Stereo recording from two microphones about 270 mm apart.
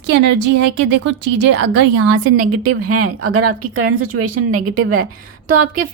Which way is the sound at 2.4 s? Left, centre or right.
Right.